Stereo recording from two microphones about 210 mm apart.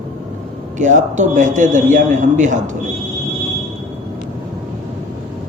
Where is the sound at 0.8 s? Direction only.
35° right (ahead or behind).